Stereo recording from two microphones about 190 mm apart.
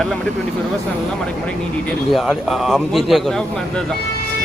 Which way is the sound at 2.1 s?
Centre (ahead or behind).